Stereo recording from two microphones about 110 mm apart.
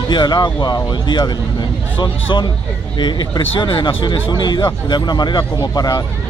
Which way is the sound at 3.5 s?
45° left (ahead or behind).